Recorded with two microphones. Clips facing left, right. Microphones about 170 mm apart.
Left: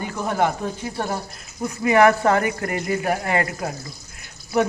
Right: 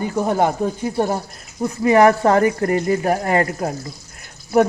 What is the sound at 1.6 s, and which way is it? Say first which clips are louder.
Speech: right 3 dB; 35° right (ahead or behind).